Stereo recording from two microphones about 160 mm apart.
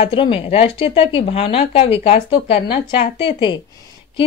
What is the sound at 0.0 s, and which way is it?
Speech, 35° left (ahead or behind).